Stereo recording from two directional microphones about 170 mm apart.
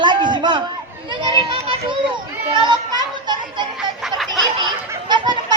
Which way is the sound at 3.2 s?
25° right (ahead or behind).